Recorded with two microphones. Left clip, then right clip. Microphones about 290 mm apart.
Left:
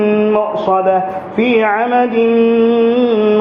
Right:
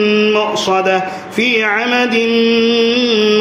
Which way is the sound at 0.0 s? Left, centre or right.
Right.